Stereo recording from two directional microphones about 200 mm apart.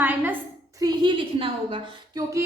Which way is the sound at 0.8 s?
20° right (ahead or behind).